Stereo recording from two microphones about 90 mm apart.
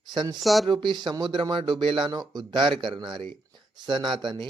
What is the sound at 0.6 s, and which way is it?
Speech, 60° right (ahead or behind).